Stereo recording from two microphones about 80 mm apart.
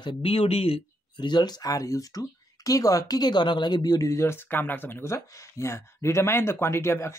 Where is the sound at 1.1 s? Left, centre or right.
Left.